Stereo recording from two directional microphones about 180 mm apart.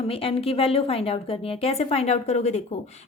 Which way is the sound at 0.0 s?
30° left (ahead or behind).